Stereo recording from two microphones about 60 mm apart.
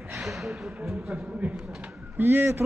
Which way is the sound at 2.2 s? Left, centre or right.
Right.